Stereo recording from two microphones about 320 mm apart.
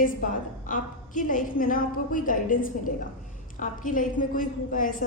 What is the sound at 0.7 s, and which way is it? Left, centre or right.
A woman's voice, left.